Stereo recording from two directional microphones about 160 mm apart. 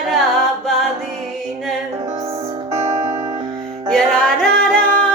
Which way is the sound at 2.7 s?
45° right (ahead or behind).